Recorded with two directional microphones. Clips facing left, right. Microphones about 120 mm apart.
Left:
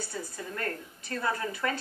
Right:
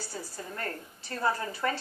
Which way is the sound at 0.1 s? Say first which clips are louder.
Left 2 dB; 35° right (ahead or behind).